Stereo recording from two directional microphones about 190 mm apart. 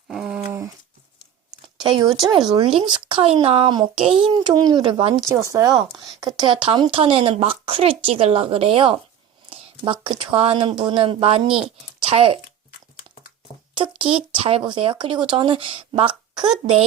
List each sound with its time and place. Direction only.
0.1 s a sound: 5° right (ahead or behind)
1.8 s speech: 25° right (ahead or behind)
5.3 s speech: 15° right (ahead or behind)
13.7 s speech: 25° right (ahead or behind)